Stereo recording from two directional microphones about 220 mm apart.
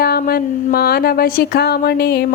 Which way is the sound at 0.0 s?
45° left (ahead or behind).